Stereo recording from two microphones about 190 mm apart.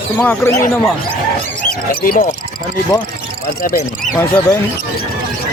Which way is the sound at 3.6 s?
45° left (ahead or behind).